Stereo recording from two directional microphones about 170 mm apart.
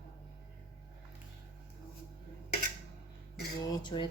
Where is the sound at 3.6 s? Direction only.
25° left (ahead or behind).